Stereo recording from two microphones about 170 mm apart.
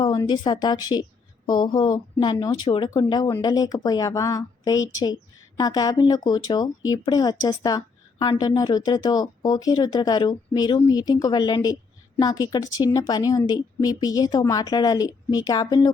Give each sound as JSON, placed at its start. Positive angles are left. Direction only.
{"t": 0.0, "sound": "speech", "side_deg": 20}